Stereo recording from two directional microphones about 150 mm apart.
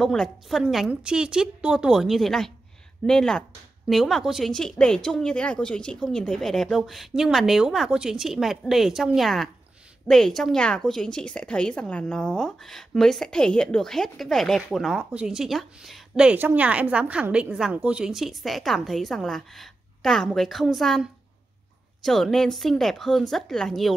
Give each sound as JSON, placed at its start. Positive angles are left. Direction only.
{"t": 0.0, "sound": "a woman's voice", "side_deg": 0}